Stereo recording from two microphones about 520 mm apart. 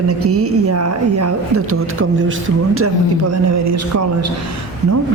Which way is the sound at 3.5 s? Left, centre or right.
Right.